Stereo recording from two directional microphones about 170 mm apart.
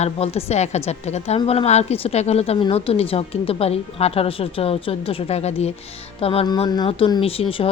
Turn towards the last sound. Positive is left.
turn(degrees=35)  # may be behind; listen again after turning